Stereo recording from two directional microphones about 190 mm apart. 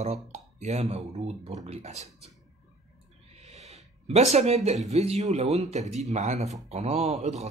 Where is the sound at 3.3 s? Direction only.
35° right (ahead or behind).